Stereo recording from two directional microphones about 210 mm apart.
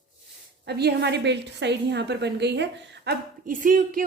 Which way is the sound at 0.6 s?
50° right (ahead or behind).